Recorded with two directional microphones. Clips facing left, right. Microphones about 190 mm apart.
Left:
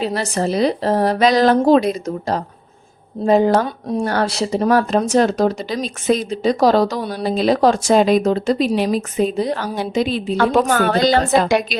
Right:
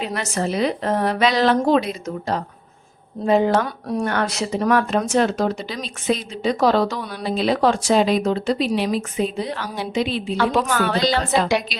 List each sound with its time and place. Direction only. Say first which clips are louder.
0.0 s speech: left 4 dB; 35° left (ahead or behind)
3.6 s speech: left 3 dB; 30° left (ahead or behind); by 11.8 s 50° left (ahead or behind)